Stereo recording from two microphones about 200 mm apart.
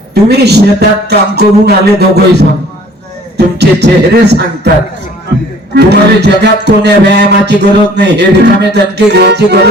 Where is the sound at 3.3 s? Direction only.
55° right (ahead or behind).